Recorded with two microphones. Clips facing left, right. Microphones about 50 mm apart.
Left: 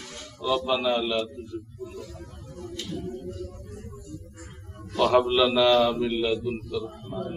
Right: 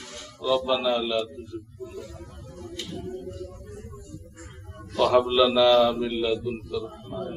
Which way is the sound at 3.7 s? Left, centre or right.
Centre.